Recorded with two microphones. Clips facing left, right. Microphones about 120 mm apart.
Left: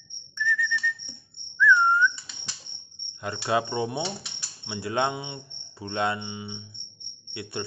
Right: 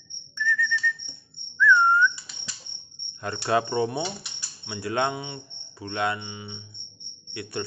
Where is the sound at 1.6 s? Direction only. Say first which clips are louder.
Right 1 dB; 10° left (ahead or behind).